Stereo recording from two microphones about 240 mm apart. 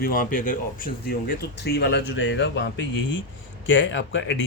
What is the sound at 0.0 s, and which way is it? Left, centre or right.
Speech, left.